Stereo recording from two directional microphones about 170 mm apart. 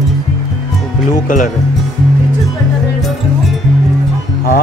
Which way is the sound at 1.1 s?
50° left (ahead or behind).